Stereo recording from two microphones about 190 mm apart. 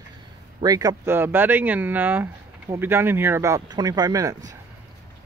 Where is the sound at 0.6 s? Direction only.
20° right (ahead or behind).